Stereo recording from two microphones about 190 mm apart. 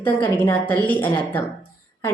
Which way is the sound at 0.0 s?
10° left (ahead or behind).